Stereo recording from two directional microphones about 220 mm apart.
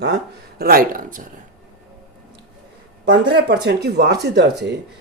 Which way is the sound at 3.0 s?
50° right (ahead or behind).